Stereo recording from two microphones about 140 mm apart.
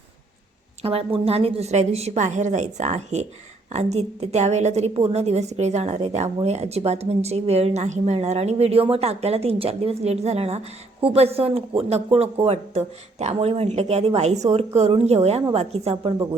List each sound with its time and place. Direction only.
0.8 s a woman's voice: 45° right (ahead or behind)